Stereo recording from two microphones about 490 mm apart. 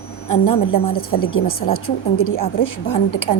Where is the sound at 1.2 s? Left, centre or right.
Left.